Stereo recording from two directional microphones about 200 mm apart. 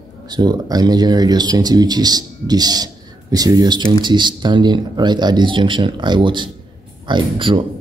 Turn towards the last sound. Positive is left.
turn(degrees=-25)  # may be behind; listen again after turning